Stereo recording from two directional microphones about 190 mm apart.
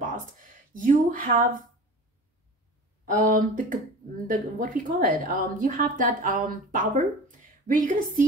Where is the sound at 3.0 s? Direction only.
45° right (ahead or behind).